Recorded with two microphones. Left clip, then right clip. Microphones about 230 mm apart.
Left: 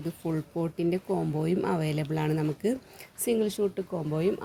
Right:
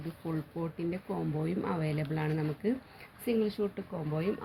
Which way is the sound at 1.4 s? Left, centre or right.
Left.